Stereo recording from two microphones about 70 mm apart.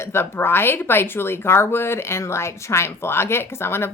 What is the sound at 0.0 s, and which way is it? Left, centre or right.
A woman's voice, left.